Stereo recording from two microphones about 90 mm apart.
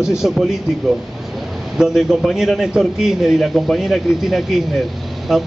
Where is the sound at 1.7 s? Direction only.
5° right (ahead or behind).